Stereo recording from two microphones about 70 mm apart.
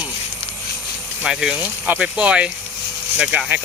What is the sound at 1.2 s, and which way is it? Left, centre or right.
Speech, centre.